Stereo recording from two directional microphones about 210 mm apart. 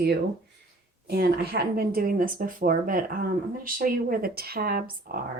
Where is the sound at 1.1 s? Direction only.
50° right (ahead or behind).